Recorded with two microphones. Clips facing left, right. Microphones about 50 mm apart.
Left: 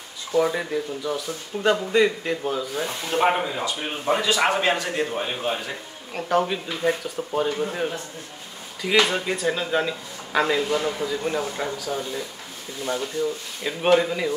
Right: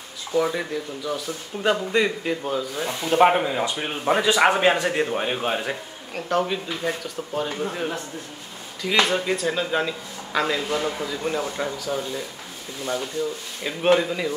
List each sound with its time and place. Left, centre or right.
0.3 s a man's voice: centre
6.1 s speech: centre
9.0 s speech: centre
13.9 s speech: centre